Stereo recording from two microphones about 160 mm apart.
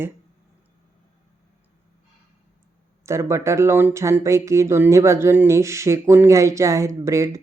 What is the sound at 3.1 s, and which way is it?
Speech, 15° right (ahead or behind).